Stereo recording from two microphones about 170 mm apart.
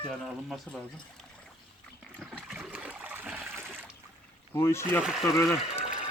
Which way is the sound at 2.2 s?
5° right (ahead or behind).